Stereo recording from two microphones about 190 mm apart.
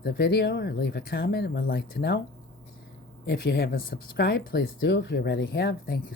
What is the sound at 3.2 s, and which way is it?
Speech, 60° left (ahead or behind).